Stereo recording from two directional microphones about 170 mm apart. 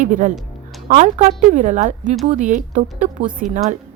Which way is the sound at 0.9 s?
45° right (ahead or behind).